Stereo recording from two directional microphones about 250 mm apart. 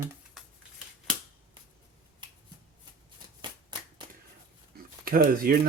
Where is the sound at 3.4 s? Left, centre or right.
Centre.